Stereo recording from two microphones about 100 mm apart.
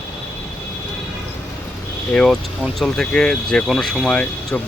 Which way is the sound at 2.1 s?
5° left (ahead or behind).